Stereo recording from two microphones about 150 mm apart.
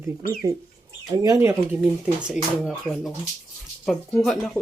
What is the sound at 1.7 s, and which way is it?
Speech, 5° right (ahead or behind).